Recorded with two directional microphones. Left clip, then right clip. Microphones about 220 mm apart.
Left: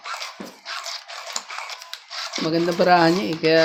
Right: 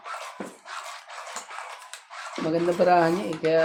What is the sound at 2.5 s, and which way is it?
Speech, 35° left (ahead or behind).